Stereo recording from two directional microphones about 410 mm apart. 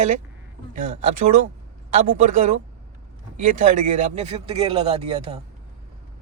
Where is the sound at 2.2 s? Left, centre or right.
Centre.